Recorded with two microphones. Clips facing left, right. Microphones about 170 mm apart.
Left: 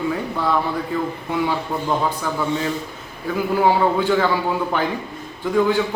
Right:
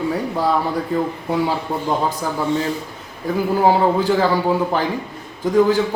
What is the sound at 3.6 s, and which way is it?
A man's voice, 40° right (ahead or behind).